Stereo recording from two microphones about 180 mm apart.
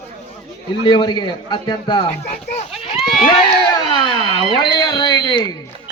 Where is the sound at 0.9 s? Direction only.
25° left (ahead or behind).